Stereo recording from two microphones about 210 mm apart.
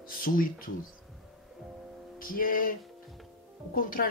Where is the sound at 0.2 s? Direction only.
45° left (ahead or behind).